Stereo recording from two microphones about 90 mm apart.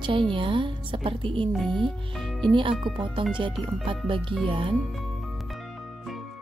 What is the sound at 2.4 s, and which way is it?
A woman's voice, 70° right (ahead or behind).